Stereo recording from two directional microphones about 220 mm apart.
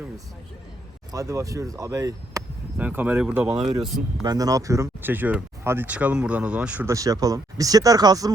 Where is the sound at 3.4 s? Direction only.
25° right (ahead or behind).